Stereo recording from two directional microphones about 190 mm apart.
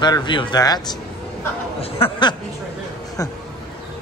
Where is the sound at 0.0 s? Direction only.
25° left (ahead or behind).